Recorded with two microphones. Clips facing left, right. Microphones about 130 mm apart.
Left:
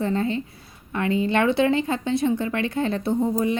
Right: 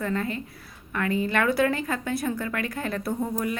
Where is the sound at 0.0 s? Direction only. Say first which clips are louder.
Left 5 dB; 30° left (ahead or behind).